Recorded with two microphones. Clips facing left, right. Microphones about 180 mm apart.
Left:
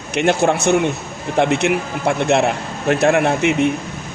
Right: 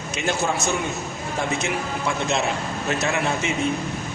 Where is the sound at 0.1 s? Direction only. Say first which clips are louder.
Left 9 dB; 65° left (ahead or behind).